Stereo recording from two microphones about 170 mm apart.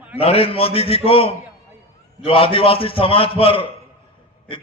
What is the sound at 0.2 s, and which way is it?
A man's voice, 35° left (ahead or behind).